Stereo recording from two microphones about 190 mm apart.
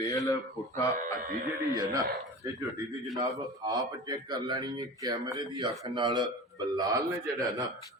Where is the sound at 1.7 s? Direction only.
20° right (ahead or behind).